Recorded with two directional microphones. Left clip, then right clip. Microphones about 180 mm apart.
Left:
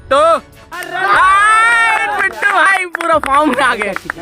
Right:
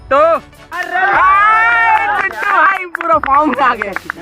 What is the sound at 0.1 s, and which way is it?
Speech, 25° left (ahead or behind).